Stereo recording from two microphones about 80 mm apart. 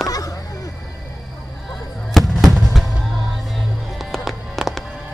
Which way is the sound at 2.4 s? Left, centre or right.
Centre.